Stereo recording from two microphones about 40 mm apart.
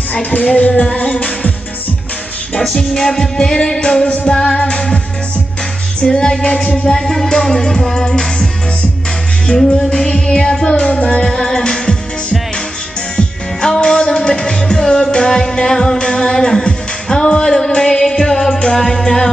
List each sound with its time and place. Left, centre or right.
0.1 s music: left
2.6 s music: centre
6.4 s music: centre
9.7 s music: centre
11.0 s music: left
11.2 s music: centre
13.1 s music: left